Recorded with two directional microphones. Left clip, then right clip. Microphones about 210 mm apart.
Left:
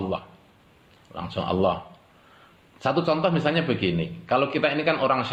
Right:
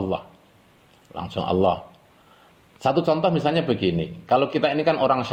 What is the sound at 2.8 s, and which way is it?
Speech, 40° right (ahead or behind).